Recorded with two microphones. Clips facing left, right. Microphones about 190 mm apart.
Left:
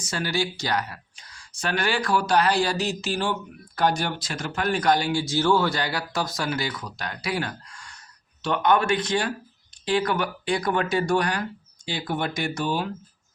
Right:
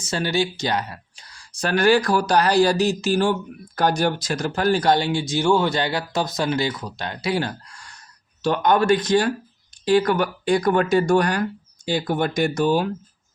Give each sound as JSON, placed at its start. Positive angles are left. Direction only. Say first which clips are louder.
{"t": 0.0, "sound": "speech", "louder": "right 4 dB", "side_deg": -25}